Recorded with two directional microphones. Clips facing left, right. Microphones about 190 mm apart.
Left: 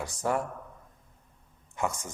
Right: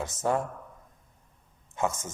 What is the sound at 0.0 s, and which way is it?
Speech, 20° right (ahead or behind).